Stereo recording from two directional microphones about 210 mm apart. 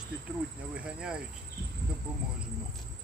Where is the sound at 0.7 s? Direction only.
5° right (ahead or behind).